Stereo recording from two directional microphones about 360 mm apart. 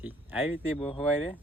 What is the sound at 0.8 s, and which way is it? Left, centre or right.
Speech, centre.